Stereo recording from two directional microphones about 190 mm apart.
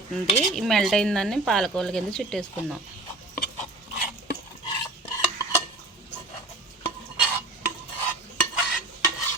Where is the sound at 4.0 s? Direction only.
55° left (ahead or behind).